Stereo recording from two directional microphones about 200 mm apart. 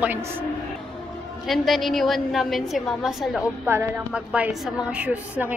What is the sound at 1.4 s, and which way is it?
A woman's voice, centre (ahead or behind).